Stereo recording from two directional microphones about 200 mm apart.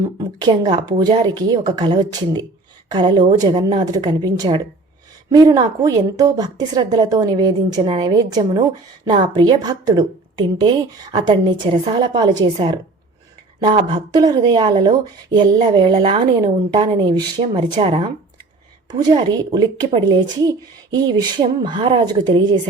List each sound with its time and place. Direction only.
0.0 s speech: 20° right (ahead or behind)